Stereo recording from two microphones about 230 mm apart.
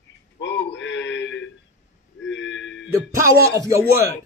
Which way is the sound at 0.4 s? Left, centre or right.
Left.